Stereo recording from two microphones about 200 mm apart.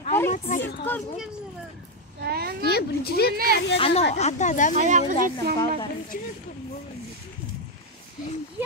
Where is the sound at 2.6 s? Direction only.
55° left (ahead or behind).